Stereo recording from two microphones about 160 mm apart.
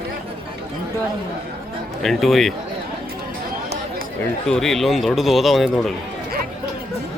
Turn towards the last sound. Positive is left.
turn(degrees=0)  # may be behind; listen again after turning